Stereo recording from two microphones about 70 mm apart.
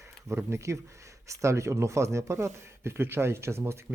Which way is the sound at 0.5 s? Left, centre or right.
Right.